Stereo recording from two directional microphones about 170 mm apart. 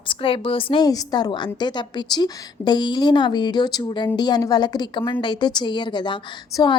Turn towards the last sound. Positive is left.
turn(degrees=25)  # may be behind; listen again after turning